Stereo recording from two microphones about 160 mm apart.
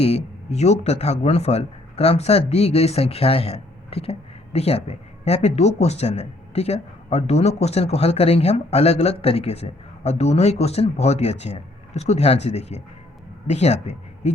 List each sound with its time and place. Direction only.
0.0 s a man's voice: 40° left (ahead or behind)